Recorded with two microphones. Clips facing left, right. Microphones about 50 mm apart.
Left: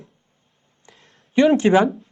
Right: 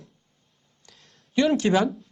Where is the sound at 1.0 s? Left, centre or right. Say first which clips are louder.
Left 4 dB; centre.